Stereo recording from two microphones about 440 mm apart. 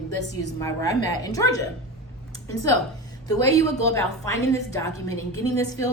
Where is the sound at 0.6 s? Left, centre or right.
Centre.